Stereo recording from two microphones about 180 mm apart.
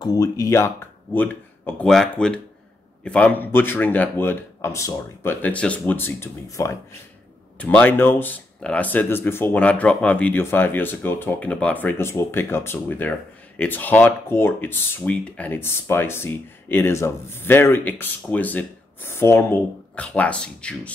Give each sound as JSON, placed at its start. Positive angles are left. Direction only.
{"t": 0.0, "sound": "speech", "side_deg": 20}
{"t": 1.8, "sound": "speech", "side_deg": 5}